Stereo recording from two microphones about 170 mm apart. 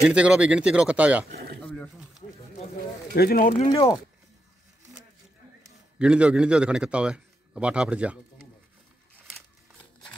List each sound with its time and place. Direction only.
0.0 s speech: 5° right (ahead or behind)
1.3 s a sound: 65° right (ahead or behind)
1.6 s a sound: 5° left (ahead or behind)
3.2 s speech: 60° left (ahead or behind)
3.5 s speech: 40° left (ahead or behind)
5.9 s a man's voice: 5° right (ahead or behind)